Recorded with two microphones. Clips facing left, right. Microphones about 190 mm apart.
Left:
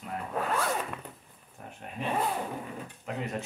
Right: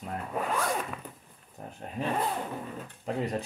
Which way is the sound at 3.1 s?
35° right (ahead or behind).